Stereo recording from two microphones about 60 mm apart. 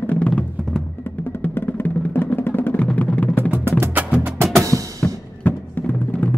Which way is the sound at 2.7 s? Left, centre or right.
Left.